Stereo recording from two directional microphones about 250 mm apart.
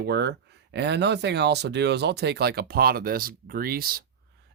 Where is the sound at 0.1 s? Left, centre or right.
Right.